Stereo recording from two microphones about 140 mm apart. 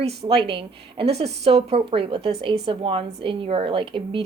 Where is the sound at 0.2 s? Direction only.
40° right (ahead or behind).